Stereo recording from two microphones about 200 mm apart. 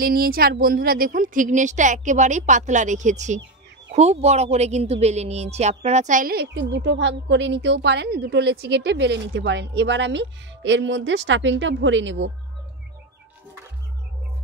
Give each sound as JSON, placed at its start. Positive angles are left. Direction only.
{"t": 0.0, "sound": "a woman's voice", "side_deg": -50}